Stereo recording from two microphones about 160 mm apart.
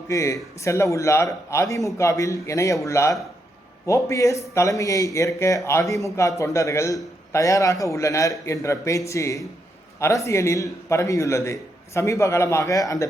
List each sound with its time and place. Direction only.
0.1 s a man's voice: 20° left (ahead or behind)